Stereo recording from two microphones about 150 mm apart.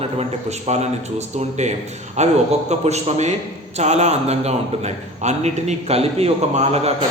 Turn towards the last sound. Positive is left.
turn(degrees=-45)  # may be behind; listen again after turning